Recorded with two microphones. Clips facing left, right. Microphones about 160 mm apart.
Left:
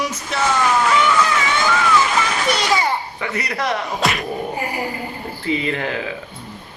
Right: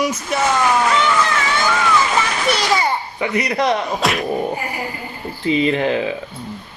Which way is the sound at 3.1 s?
15° right (ahead or behind).